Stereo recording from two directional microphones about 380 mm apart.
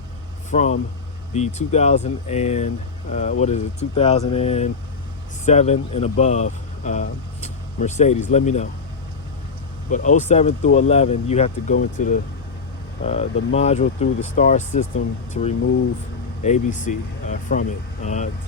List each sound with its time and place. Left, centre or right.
0.5 s speech: centre
9.9 s speech: centre